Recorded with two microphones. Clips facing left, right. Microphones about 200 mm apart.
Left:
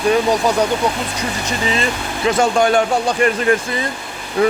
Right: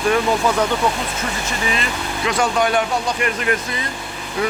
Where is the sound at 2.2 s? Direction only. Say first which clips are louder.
Left 4 dB; 25° left (ahead or behind).